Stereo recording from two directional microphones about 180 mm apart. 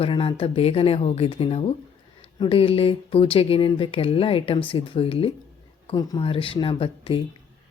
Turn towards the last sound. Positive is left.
turn(degrees=30)  # may be behind; listen again after turning